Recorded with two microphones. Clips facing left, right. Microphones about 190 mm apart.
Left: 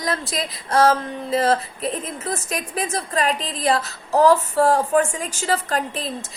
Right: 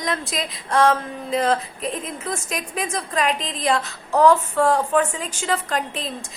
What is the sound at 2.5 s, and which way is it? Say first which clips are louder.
Speech: left 2 dB; 40° left (ahead or behind).